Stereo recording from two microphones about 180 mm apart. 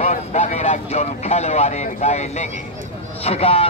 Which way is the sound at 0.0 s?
40° left (ahead or behind).